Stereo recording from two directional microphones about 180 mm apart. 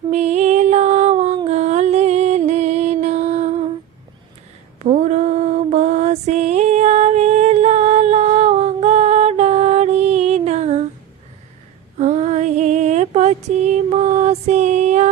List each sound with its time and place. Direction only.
0.1 s a sound: 40° right (ahead or behind)
1.5 s music: 40° right (ahead or behind)
4.8 s mantra: 40° right (ahead or behind)
11.9 s female singing: 40° right (ahead or behind)